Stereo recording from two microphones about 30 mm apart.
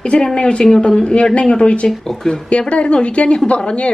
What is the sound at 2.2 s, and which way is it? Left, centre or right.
Speech, left.